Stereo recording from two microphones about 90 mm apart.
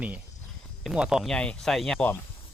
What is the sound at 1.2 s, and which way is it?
Speech, 10° left (ahead or behind).